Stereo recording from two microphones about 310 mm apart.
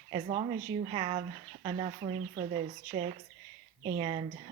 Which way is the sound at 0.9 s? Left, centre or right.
Centre.